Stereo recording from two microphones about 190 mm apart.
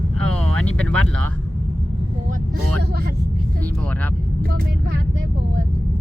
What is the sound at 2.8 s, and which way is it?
Vehicle, 55° right (ahead or behind).